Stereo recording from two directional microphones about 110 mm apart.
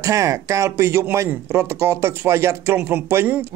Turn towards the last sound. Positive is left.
turn(degrees=-20)  # may be behind; listen again after turning